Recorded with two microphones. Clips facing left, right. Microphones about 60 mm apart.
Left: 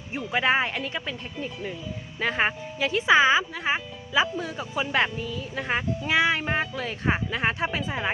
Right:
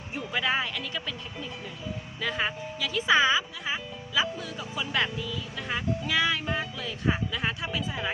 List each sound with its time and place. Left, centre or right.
0.3 s speech: left
2.2 s speech: left
3.6 s speech: left
6.1 s speech: left
6.4 s speech: left